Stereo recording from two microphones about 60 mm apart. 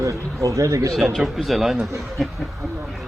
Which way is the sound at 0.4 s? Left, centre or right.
Right.